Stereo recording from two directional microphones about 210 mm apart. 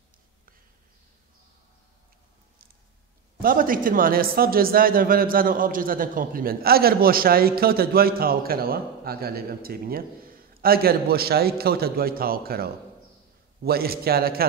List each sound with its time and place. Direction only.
3.4 s a man's voice: 40° right (ahead or behind)